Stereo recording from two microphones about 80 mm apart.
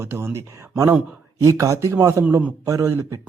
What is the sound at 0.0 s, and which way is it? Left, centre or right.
Speech, right.